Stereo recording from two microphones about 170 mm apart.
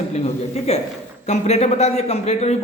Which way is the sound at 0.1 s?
40° left (ahead or behind).